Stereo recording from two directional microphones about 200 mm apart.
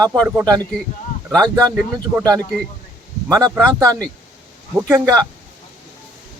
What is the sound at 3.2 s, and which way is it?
Speech, 15° right (ahead or behind).